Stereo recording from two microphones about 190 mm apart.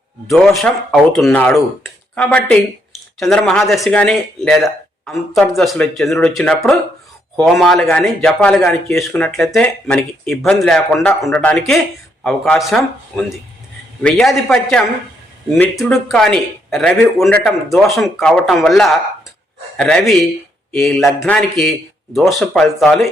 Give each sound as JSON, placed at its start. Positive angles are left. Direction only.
{"t": 0.3, "sound": "speech", "side_deg": 0}